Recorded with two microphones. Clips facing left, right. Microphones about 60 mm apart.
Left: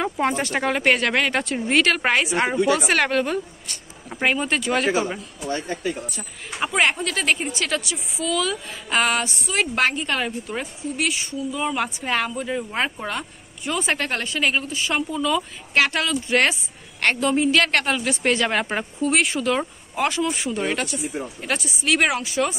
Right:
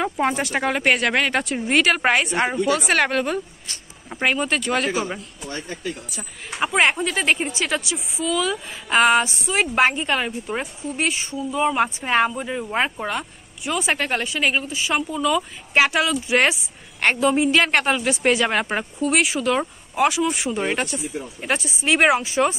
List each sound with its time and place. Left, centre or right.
0.0 s speech: centre
5.5 s speech: left
6.0 s a woman's voice: centre
10.5 s a woman's voice: right; by 20.3 s centre
20.4 s a woman's voice: right